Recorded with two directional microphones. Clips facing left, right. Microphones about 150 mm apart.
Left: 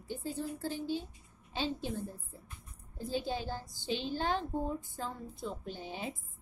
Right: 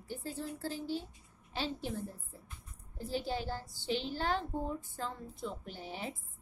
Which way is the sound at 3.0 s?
15° left (ahead or behind).